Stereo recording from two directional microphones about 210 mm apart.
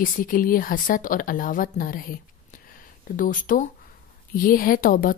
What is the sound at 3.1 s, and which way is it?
A woman's voice, 40° left (ahead or behind).